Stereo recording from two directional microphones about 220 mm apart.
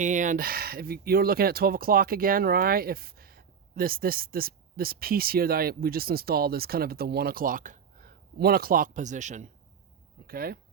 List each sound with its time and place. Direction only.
0.0 s speech: 35° right (ahead or behind)